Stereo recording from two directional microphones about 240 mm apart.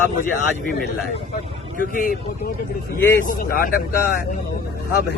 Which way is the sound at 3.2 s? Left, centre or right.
Left.